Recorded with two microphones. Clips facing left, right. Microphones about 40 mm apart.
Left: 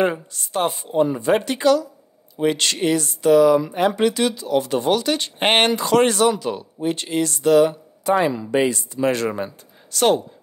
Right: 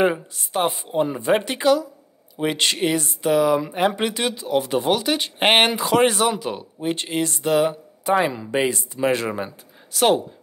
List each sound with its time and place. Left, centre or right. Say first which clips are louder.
0.0 s speech: right 1 dB; centre